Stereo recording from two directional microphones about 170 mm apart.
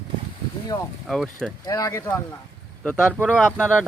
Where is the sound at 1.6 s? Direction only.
20° left (ahead or behind).